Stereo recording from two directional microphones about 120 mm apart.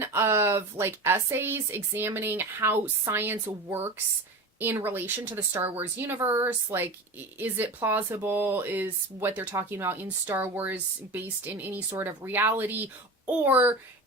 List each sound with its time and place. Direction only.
0.0 s a woman's voice: 20° right (ahead or behind)